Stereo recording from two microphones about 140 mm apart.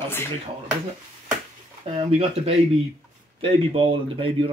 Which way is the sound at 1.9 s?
45° right (ahead or behind).